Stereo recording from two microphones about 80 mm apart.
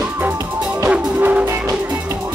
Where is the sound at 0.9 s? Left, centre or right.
Centre.